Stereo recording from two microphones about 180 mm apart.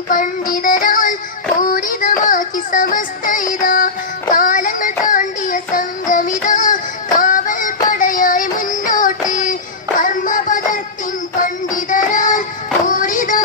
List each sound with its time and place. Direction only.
0.1 s music: 50° left (ahead or behind)
4.4 s child singing: 50° left (ahead or behind)
9.3 s music: 45° left (ahead or behind)
11.3 s child singing: 45° left (ahead or behind)